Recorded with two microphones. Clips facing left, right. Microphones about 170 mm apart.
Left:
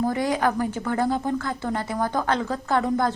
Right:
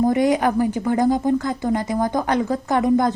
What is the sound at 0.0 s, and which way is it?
A woman's voice, 20° right (ahead or behind).